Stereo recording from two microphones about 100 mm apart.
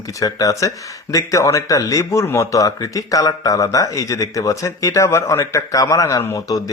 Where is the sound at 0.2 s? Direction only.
35° left (ahead or behind).